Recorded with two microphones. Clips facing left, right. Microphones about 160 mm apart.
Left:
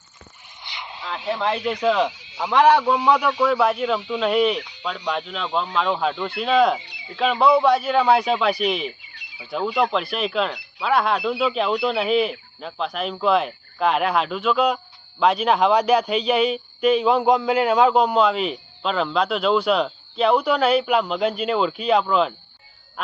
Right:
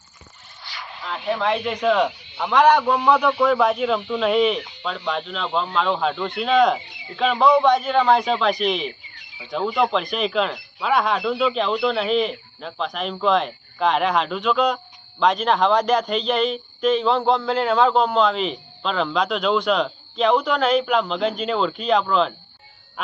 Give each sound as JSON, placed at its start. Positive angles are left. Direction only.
{"t": 0.6, "sound": "vehicle", "side_deg": 20}
{"t": 1.3, "sound": "speech", "side_deg": 0}
{"t": 2.1, "sound": "a sound", "side_deg": 90}
{"t": 2.4, "sound": "speech", "side_deg": 10}